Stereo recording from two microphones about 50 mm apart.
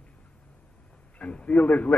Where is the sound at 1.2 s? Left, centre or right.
Left.